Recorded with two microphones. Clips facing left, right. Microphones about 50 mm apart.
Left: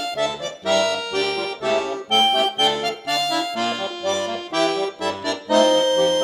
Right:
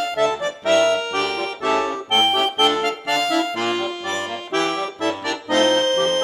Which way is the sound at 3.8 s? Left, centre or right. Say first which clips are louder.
Left 1 dB; right.